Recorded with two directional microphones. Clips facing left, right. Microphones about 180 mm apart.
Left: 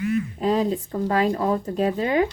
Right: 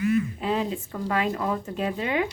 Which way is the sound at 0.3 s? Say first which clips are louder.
Left 5 dB; 40° left (ahead or behind).